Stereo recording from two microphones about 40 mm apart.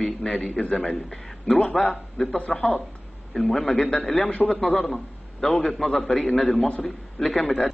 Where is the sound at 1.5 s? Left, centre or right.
Left.